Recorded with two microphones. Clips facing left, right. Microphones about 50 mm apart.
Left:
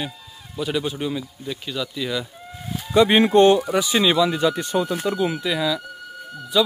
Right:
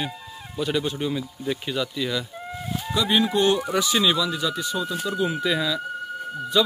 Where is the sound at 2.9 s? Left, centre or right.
Left.